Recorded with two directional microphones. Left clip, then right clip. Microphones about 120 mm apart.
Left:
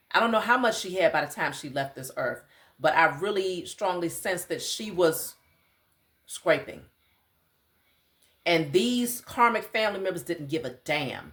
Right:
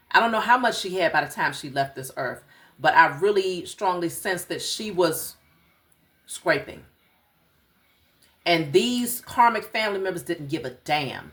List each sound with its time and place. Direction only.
0.1 s speech: 25° left (ahead or behind)
8.4 s speech: 25° left (ahead or behind)